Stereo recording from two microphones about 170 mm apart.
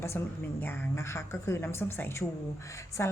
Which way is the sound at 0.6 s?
15° left (ahead or behind).